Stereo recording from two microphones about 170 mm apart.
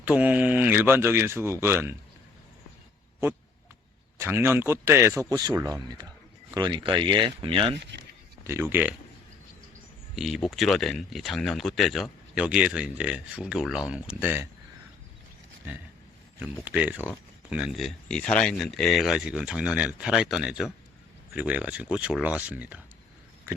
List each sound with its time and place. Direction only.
0.0 s speech: 10° right (ahead or behind)
4.2 s speech: 15° right (ahead or behind); by 7.8 s 30° right (ahead or behind)
8.4 s speech: 15° right (ahead or behind)
10.2 s speech: centre (ahead or behind)
16.4 s speech: 10° right (ahead or behind)